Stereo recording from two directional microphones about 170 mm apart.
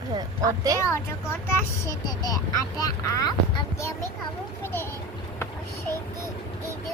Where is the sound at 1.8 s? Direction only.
20° left (ahead or behind).